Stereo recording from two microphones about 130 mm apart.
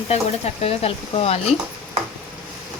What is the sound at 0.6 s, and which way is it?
Speech, 50° left (ahead or behind).